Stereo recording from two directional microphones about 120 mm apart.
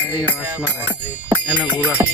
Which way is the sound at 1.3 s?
15° right (ahead or behind).